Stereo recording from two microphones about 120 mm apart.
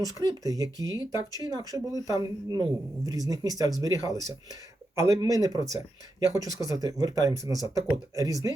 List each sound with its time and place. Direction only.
0.2 s speech: 30° right (ahead or behind)